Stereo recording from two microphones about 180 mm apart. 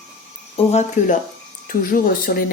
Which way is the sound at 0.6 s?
40° left (ahead or behind).